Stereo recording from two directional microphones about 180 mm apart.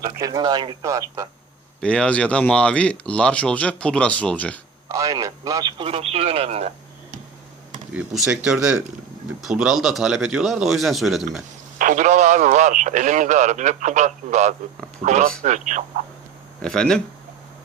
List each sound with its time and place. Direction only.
0.0 s speech: 20° right (ahead or behind)
1.8 s speech: 5° left (ahead or behind)
4.9 s speech: 20° right (ahead or behind); by 7.2 s 40° right (ahead or behind)
7.9 s a man's voice: 5° right (ahead or behind)
11.8 s a man's voice: 45° right (ahead or behind)
16.6 s speech: 5° left (ahead or behind)